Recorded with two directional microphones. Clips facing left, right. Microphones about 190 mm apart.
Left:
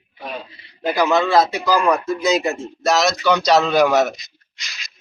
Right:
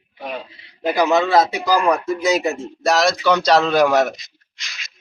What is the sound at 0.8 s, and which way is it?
Speech, 20° right (ahead or behind).